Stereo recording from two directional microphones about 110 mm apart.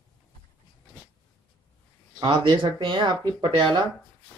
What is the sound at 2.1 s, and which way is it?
Speech, 45° right (ahead or behind).